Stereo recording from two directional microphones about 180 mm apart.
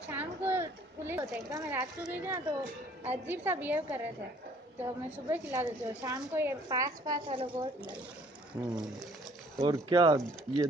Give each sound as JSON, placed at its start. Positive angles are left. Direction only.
{"t": 0.1, "sound": "a sound", "side_deg": -10}
{"t": 2.0, "sound": "a woman's voice", "side_deg": -10}
{"t": 5.1, "sound": "a woman's voice", "side_deg": -10}
{"t": 7.2, "sound": "a woman's voice", "side_deg": -30}
{"t": 8.5, "sound": "a woman's voice", "side_deg": -15}